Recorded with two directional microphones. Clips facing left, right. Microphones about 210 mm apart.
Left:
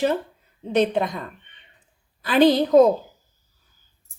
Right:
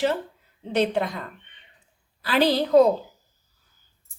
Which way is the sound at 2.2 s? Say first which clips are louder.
Left 5 dB; 20° left (ahead or behind).